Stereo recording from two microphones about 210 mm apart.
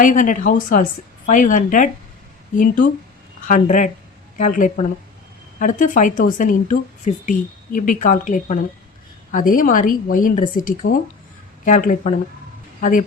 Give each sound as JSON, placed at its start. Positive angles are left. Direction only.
{"t": 0.0, "sound": "a woman's voice", "side_deg": 40}